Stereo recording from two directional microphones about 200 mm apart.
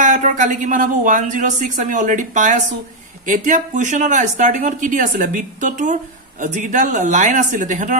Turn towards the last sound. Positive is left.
turn(degrees=-40)  # may be behind; listen again after turning